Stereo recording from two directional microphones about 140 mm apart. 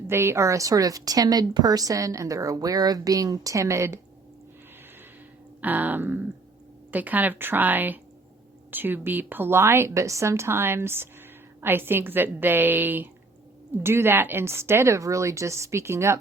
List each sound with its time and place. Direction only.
0.1 s a woman's voice: 20° right (ahead or behind)
5.5 s a woman's voice: 10° right (ahead or behind)